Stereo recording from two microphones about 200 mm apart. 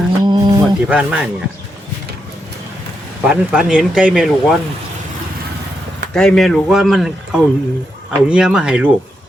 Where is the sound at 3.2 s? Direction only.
5° right (ahead or behind).